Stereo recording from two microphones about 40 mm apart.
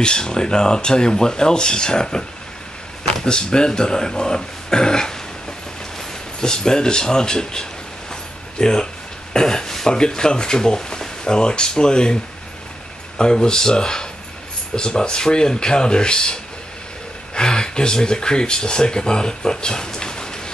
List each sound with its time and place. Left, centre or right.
0.0 s speech: centre
6.4 s speech: centre
8.1 s mechanisms: centre
9.3 s speech: centre
13.2 s speech: centre